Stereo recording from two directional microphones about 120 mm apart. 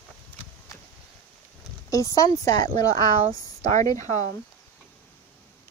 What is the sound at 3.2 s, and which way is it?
Speech, 75° right (ahead or behind).